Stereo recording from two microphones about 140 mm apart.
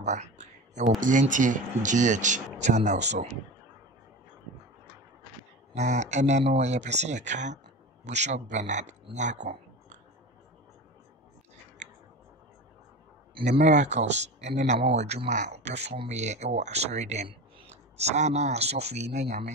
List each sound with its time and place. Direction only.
0.0 s speech: 55° right (ahead or behind)
5.8 s speech: 55° right (ahead or behind)
13.5 s speech: 55° right (ahead or behind)